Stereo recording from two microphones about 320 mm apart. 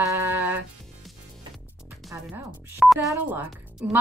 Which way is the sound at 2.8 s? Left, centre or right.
Centre.